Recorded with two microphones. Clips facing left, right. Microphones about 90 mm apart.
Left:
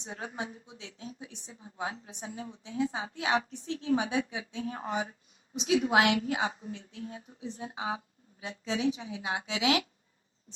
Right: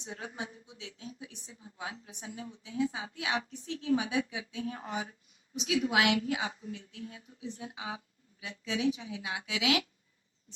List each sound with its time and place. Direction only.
0.0 s a woman's voice: 35° left (ahead or behind)